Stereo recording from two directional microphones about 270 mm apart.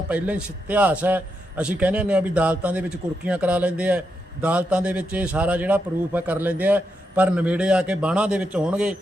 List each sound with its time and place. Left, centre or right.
0.1 s a man's voice: centre